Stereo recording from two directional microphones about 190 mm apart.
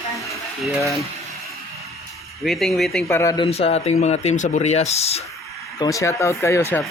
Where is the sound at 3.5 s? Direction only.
30° left (ahead or behind).